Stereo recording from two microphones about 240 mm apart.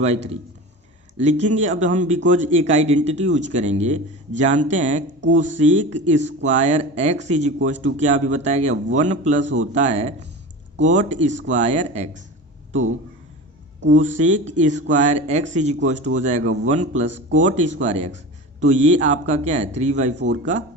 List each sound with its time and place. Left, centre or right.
1.2 s speech: right
5.2 s speech: right
5.5 s speech: right
14.2 s speech: right
16.4 s speech: right
16.6 s speech: right
17.1 s speech: right
17.3 s speech: right